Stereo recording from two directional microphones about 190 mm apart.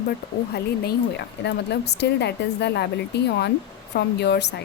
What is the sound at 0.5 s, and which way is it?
A woman's voice, 60° left (ahead or behind).